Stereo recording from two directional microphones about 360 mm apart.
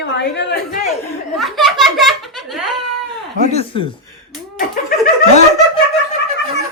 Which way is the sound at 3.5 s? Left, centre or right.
Centre.